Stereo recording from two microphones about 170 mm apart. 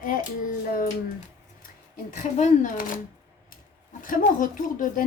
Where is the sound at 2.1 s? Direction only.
50° left (ahead or behind).